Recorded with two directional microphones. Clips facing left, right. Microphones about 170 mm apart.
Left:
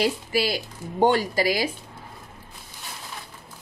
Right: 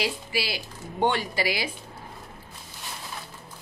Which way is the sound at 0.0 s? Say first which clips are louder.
Left 6 dB; 45° left (ahead or behind).